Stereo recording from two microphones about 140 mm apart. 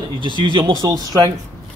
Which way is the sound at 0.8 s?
25° right (ahead or behind).